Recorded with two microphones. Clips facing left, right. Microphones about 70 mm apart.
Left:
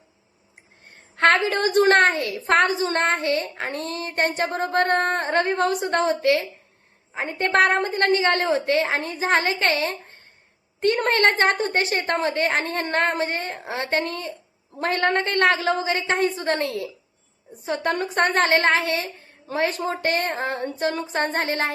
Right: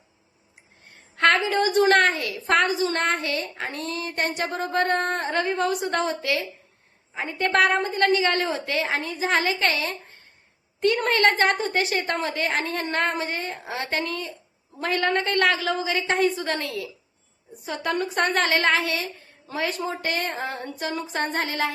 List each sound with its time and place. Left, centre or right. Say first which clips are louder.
1.1 s a woman's voice: left 2 dB; left